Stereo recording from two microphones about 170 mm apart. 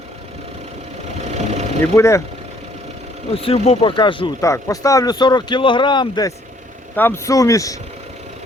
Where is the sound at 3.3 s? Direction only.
35° left (ahead or behind); by 7.8 s 20° left (ahead or behind).